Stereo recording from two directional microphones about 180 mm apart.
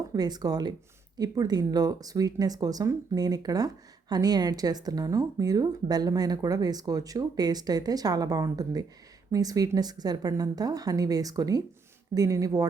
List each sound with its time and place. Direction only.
0.1 s speech: 20° right (ahead or behind)